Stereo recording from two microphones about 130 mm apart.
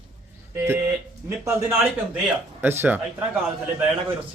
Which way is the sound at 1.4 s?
20° right (ahead or behind).